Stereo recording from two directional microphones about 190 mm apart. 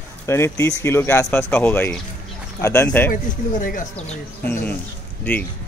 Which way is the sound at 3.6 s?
45° left (ahead or behind).